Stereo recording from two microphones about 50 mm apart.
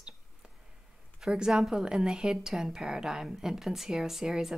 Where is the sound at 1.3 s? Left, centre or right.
Centre.